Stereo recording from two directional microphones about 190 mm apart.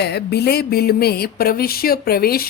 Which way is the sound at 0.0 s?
60° left (ahead or behind).